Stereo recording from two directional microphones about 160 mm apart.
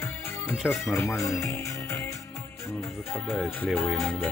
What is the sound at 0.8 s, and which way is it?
Speech, 15° left (ahead or behind).